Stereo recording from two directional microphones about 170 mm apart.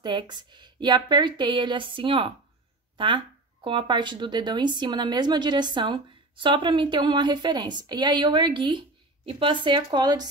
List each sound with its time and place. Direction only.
0.0 s a woman's voice: 25° right (ahead or behind)
3.6 s a woman's voice: 25° right (ahead or behind)